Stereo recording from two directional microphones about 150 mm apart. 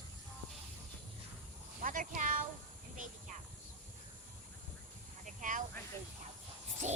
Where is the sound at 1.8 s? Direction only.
60° right (ahead or behind).